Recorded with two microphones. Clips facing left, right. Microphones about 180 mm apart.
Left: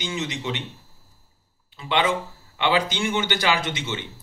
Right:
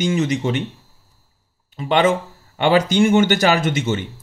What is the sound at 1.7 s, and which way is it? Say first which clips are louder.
Speech: right 6 dB; 45° right (ahead or behind).